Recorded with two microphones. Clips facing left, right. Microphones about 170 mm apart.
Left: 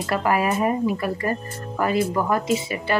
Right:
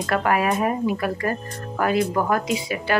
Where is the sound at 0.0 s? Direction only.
Centre (ahead or behind).